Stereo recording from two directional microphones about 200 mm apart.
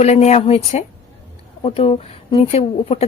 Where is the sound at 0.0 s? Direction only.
35° left (ahead or behind).